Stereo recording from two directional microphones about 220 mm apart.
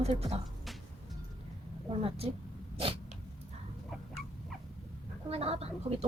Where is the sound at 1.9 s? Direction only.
25° right (ahead or behind).